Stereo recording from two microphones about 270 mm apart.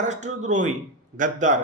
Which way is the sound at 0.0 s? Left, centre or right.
Right.